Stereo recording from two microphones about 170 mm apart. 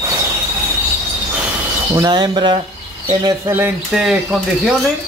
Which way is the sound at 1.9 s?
20° right (ahead or behind).